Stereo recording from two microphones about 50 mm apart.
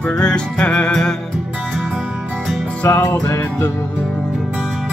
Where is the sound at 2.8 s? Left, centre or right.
Left.